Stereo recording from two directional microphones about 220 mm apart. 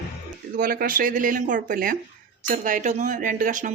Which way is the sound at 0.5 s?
40° right (ahead or behind).